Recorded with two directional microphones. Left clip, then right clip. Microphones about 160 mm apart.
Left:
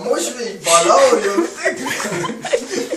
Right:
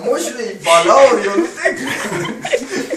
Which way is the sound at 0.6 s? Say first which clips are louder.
Right 3 dB; 15° left (ahead or behind).